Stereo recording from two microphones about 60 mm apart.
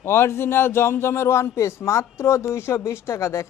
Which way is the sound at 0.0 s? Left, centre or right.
Left.